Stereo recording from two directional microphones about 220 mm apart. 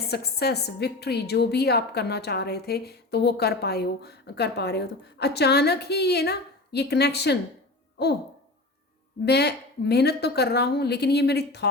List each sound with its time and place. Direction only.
0.1 s a woman's voice: 45° left (ahead or behind)
9.2 s a woman's voice: 50° left (ahead or behind)